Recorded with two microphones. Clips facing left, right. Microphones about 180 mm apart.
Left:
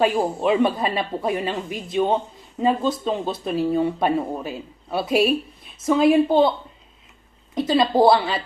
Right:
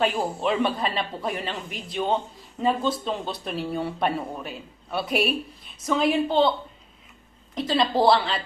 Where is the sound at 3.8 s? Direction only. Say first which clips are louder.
Left 5 dB; 25° left (ahead or behind).